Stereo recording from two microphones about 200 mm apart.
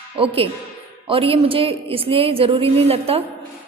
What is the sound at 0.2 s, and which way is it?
A woman's voice, 25° right (ahead or behind).